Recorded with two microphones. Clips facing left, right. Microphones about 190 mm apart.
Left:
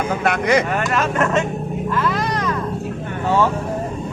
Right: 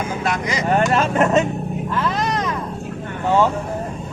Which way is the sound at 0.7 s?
30° right (ahead or behind).